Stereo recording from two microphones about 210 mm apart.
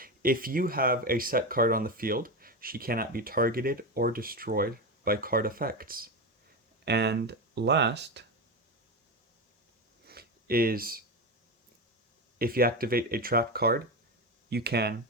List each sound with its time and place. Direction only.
0.0 s speech: 45° right (ahead or behind)
10.1 s a sound: 45° right (ahead or behind)
12.4 s speech: 45° right (ahead or behind)